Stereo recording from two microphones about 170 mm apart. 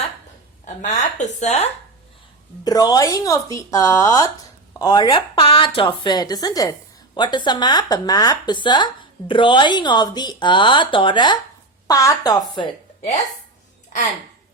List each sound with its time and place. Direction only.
0.6 s speech: 45° left (ahead or behind)
2.6 s speech: 20° left (ahead or behind)